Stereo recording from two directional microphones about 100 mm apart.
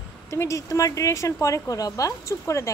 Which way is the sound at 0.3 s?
30° left (ahead or behind).